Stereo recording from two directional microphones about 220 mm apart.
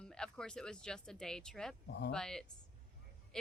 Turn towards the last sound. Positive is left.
turn(degrees=5)  # may be behind; listen again after turning